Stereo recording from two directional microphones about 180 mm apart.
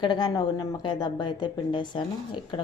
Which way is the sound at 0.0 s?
25° left (ahead or behind).